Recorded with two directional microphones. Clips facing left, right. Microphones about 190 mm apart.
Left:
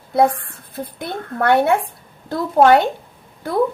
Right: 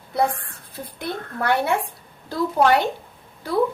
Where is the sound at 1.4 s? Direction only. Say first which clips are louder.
Left 6 dB; 55° left (ahead or behind).